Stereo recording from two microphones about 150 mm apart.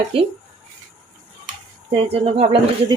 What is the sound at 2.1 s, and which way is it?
Speech, 40° right (ahead or behind).